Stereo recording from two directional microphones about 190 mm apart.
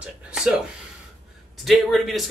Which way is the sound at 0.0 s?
5° right (ahead or behind).